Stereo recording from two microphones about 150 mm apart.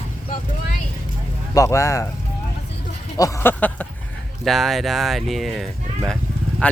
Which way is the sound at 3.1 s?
20° left (ahead or behind).